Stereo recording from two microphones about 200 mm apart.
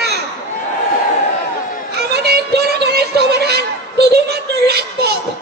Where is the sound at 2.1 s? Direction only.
55° right (ahead or behind).